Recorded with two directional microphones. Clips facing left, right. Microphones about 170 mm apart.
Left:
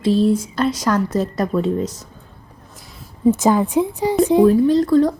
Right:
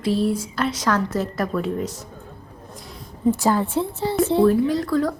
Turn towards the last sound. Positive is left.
turn(degrees=20)  # may be behind; listen again after turning